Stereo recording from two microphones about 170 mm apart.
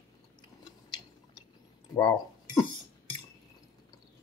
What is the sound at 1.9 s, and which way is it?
Speech, 25° left (ahead or behind).